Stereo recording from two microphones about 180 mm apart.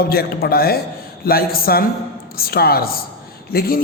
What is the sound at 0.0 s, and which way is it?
A man's voice, 60° left (ahead or behind).